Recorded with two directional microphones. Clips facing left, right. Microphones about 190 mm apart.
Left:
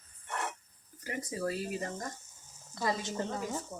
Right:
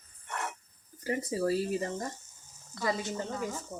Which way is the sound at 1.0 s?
30° right (ahead or behind).